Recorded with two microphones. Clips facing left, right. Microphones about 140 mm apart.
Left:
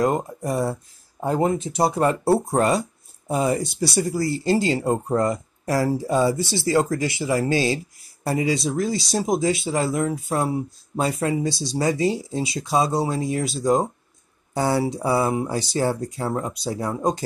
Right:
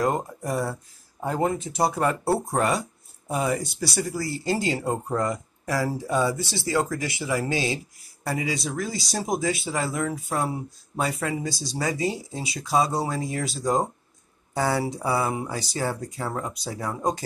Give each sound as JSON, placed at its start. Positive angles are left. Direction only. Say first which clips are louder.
{"t": 0.0, "sound": "speech", "louder": "left 3 dB", "side_deg": 20}
{"t": 14.5, "sound": "speech", "louder": "left 3 dB", "side_deg": 25}